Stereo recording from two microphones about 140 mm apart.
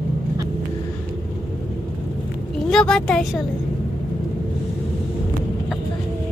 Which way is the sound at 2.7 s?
5° left (ahead or behind).